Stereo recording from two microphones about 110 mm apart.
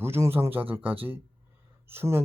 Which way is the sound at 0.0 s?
20° right (ahead or behind).